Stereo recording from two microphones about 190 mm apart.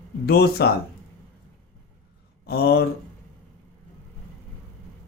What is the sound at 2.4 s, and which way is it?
Speech, 55° left (ahead or behind).